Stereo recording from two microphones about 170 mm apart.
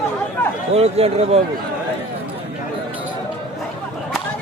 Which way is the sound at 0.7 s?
35° right (ahead or behind).